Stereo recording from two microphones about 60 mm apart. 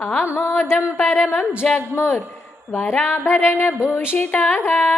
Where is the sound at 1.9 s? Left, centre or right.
Left.